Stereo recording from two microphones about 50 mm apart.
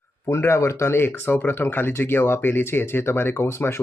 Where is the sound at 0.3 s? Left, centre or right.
Left.